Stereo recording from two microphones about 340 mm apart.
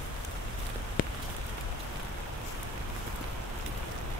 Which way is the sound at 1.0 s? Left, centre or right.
Left.